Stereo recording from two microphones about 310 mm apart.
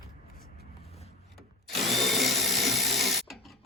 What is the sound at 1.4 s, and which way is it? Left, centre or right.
Drill, centre.